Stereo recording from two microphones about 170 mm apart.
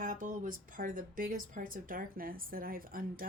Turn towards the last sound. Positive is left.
turn(degrees=-55)  # may be behind; listen again after turning